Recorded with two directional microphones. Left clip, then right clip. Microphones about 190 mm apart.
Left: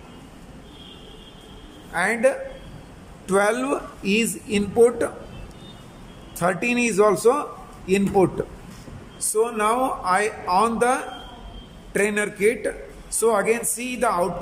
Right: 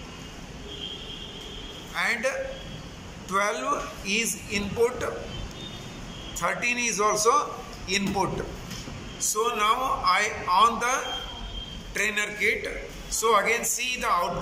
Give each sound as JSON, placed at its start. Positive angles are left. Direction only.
{"t": 2.0, "sound": "a woman's voice", "side_deg": 55}
{"t": 6.4, "sound": "a man's voice", "side_deg": 50}
{"t": 9.3, "sound": "a woman's voice", "side_deg": 60}